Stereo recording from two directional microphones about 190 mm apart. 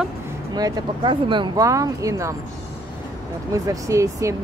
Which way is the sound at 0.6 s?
20° right (ahead or behind).